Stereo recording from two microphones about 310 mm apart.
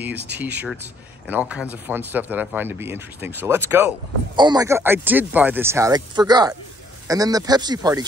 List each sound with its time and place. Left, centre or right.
0.1 s speech: right
0.4 s speech: centre